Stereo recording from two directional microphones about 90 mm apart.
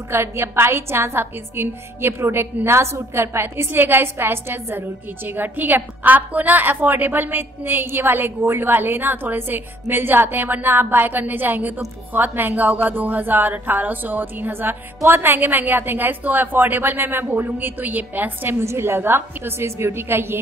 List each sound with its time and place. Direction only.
0.1 s a woman's voice: 30° right (ahead or behind)